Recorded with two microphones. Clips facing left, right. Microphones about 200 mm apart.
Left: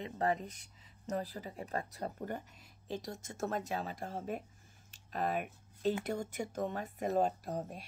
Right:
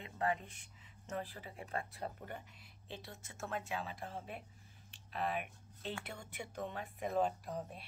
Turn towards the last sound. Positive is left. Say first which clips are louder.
# left 4 dB
turn(degrees=40)  # may be behind; listen again after turning